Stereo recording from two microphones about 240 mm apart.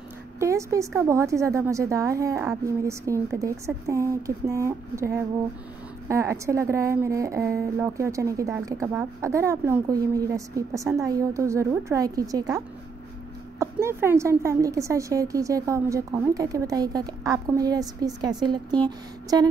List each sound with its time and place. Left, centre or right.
0.4 s a woman's voice: centre